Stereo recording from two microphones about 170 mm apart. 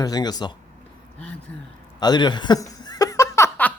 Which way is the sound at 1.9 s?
25° left (ahead or behind).